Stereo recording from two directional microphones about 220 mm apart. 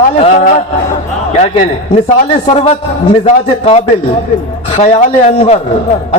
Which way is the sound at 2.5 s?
25° left (ahead or behind).